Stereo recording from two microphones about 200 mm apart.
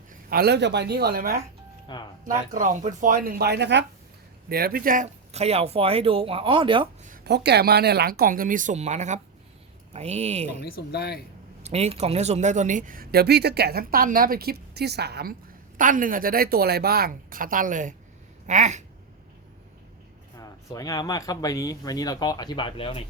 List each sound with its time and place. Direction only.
0.1 s speech: 50° right (ahead or behind)
1.9 s speech: 25° left (ahead or behind)
2.5 s speech: 40° right (ahead or behind); by 6.8 s 25° right (ahead or behind)
7.3 s speech: 55° right (ahead or behind); by 10.6 s 35° right (ahead or behind)
10.6 s speech: 55° left (ahead or behind)
11.6 s speech: 30° right (ahead or behind); by 15.4 s 50° right (ahead or behind)
15.8 s speech: 40° right (ahead or behind)
20.4 s speech: 15° left (ahead or behind)